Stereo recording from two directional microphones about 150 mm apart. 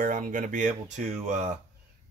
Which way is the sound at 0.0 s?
60° right (ahead or behind).